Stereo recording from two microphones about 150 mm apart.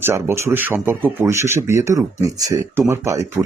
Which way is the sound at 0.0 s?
15° right (ahead or behind).